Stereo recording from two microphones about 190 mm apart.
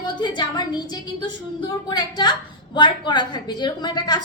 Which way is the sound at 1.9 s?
20° left (ahead or behind).